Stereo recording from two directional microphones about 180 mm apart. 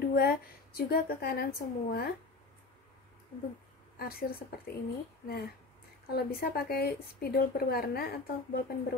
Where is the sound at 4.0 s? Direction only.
55° left (ahead or behind).